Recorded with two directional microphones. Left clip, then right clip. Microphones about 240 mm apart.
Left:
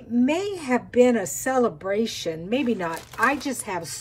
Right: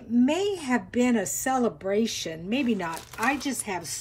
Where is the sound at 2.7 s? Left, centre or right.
Centre.